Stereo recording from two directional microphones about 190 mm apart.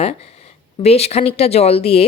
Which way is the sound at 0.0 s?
30° left (ahead or behind).